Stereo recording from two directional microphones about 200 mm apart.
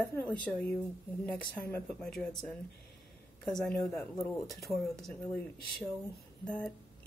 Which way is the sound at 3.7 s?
15° left (ahead or behind).